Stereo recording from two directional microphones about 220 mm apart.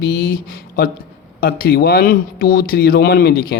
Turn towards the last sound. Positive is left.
turn(degrees=45)  # may be behind; listen again after turning